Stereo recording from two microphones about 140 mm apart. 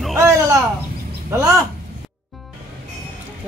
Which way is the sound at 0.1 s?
20° right (ahead or behind).